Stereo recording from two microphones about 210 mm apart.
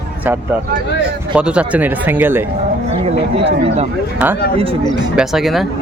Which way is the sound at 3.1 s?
30° right (ahead or behind).